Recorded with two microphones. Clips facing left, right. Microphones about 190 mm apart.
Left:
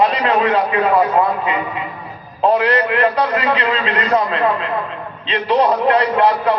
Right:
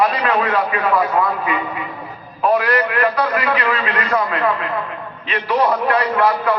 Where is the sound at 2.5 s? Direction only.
25° left (ahead or behind).